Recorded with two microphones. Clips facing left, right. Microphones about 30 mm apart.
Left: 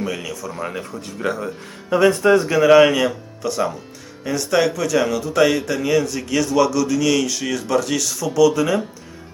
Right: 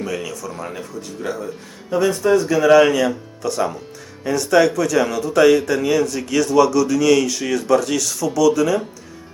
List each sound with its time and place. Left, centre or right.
0.0 s speech: centre
0.8 s speech: left
2.5 s a man's voice: centre